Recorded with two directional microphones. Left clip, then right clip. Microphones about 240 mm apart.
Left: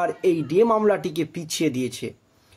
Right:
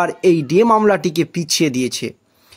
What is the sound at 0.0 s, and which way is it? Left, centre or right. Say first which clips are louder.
A man's voice: right 7 dB; right.